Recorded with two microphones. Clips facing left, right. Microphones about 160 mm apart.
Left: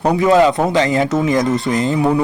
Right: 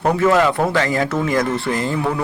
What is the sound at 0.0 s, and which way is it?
Speech, 15° left (ahead or behind).